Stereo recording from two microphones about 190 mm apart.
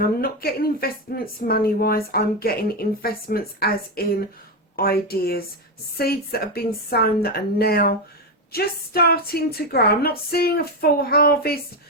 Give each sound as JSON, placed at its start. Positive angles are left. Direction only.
{"t": 0.2, "sound": "speech", "side_deg": 50}